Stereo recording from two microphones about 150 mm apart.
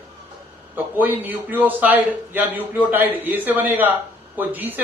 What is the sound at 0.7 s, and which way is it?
Speech, 15° right (ahead or behind).